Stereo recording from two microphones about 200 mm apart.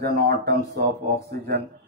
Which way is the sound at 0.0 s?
50° right (ahead or behind).